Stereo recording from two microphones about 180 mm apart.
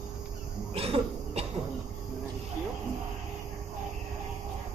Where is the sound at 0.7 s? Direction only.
35° right (ahead or behind).